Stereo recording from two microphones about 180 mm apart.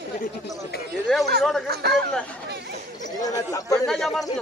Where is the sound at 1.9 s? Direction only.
5° left (ahead or behind).